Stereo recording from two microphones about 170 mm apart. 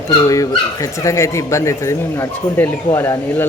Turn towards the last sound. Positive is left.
turn(degrees=15)  # may be behind; listen again after turning